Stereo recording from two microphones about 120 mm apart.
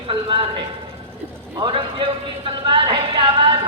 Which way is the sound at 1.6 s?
45° right (ahead or behind).